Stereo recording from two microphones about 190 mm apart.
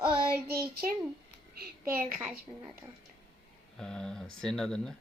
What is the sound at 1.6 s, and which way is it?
Speech, 50° right (ahead or behind).